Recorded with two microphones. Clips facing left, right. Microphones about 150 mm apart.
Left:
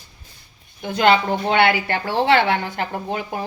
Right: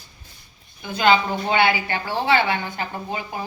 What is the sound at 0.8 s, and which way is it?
A woman's voice, 65° left (ahead or behind).